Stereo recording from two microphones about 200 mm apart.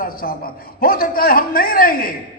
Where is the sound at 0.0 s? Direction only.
45° left (ahead or behind).